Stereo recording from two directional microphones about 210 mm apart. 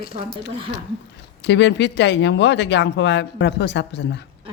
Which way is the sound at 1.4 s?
55° left (ahead or behind).